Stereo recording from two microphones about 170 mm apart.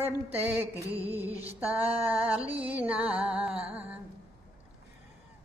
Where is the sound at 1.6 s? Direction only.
10° right (ahead or behind).